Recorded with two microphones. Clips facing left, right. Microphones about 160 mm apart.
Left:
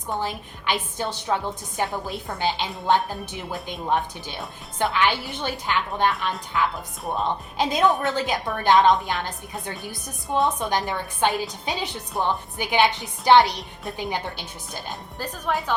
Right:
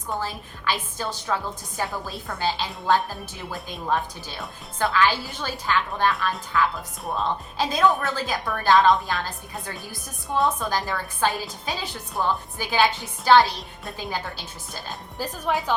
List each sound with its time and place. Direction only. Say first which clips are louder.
0.2 s a woman's voice: left 2 dB; 20° left (ahead or behind)
12.1 s a woman's voice: left 1 dB; centre (ahead or behind)
12.5 s a woman's voice: left 2 dB; 20° left (ahead or behind)
15.2 s speech: right 1 dB; 10° right (ahead or behind)